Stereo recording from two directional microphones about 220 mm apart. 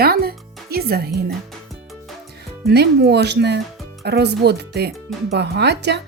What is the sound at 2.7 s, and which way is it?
Speech, 45° right (ahead or behind).